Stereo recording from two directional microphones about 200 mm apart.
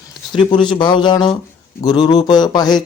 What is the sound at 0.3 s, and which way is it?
Speech, 25° left (ahead or behind).